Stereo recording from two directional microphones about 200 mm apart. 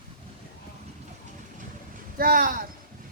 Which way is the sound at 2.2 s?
45° right (ahead or behind).